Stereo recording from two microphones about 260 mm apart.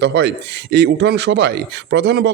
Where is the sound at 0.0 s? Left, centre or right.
Right.